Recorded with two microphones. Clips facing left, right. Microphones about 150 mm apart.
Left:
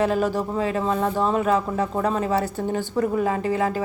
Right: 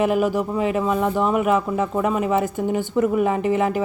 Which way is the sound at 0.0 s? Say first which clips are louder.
Right 2 dB; 15° right (ahead or behind).